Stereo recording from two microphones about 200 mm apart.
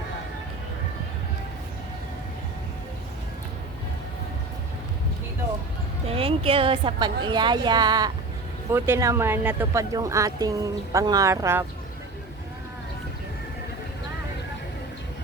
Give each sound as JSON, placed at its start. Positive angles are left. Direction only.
{"t": 6.1, "sound": "speech", "side_deg": -30}